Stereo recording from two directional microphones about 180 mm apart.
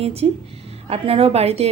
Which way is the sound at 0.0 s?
35° right (ahead or behind).